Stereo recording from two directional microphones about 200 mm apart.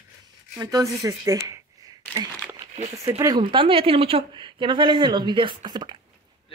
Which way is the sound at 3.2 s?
20° right (ahead or behind).